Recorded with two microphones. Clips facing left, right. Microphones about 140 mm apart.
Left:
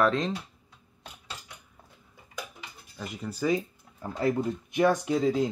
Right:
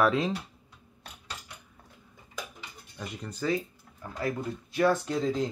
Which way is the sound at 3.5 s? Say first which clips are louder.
Left 3 dB; 25° left (ahead or behind).